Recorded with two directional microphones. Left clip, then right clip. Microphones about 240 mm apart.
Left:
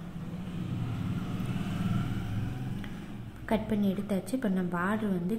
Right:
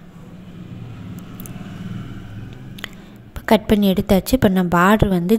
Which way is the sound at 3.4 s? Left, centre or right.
Right.